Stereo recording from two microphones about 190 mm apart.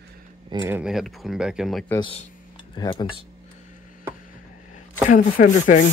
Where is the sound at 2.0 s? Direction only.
30° left (ahead or behind).